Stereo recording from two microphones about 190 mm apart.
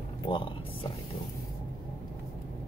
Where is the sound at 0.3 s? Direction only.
25° left (ahead or behind).